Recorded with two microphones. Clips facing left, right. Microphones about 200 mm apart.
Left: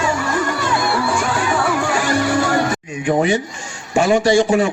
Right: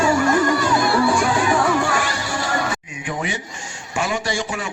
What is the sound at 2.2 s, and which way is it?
Music, 60° left (ahead or behind).